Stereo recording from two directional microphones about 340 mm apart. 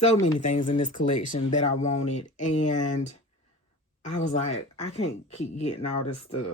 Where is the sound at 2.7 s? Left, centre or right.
Left.